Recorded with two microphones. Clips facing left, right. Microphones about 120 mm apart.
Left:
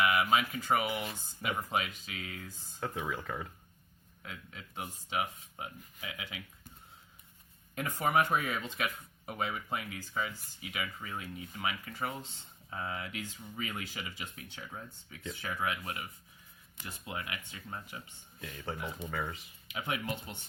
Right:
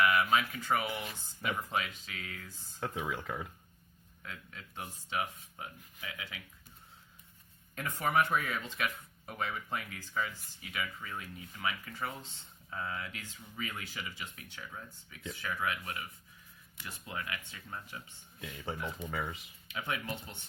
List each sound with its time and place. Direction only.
0.0 s speech: 15° left (ahead or behind)
3.1 s speech: 5° right (ahead or behind)
4.2 s speech: 20° left (ahead or behind)
7.8 s speech: 15° left (ahead or behind)
18.3 s speech: 5° right (ahead or behind)
19.6 s speech: 15° left (ahead or behind)